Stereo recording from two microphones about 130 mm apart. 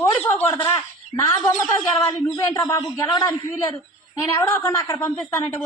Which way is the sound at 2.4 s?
25° left (ahead or behind).